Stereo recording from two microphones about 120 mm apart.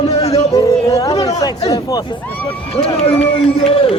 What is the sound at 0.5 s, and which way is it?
Chatter, 30° left (ahead or behind).